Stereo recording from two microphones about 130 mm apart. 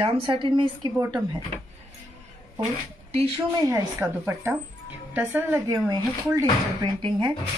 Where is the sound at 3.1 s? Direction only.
50° right (ahead or behind).